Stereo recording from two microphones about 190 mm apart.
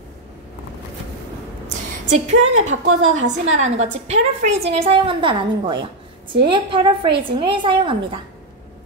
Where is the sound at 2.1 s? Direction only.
40° right (ahead or behind).